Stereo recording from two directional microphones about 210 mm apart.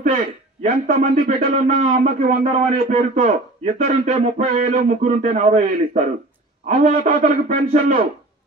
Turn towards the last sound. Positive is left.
turn(degrees=-35)  # may be behind; listen again after turning